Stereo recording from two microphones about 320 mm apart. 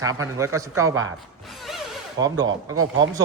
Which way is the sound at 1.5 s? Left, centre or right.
Centre.